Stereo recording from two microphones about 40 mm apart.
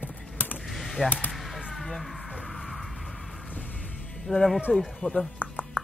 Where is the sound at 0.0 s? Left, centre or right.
Left.